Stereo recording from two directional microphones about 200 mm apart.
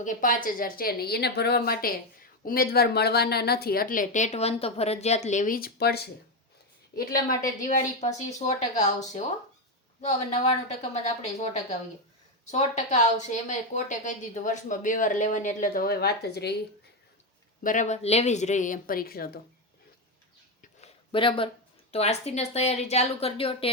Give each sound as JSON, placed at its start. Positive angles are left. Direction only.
{"t": 0.0, "sound": "speech", "side_deg": 45}
{"t": 10.9, "sound": "speech", "side_deg": 35}
{"t": 17.6, "sound": "speech", "side_deg": 40}
{"t": 21.1, "sound": "speech", "side_deg": 25}